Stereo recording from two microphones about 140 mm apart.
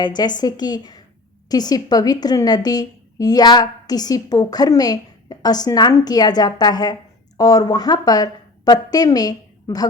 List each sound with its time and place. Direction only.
0.0 s a woman's voice: 30° left (ahead or behind)